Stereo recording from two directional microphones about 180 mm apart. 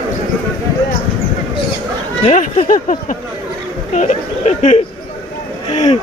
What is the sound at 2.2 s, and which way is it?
Speech, 45° left (ahead or behind).